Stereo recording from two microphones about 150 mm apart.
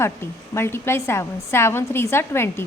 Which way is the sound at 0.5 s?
15° left (ahead or behind).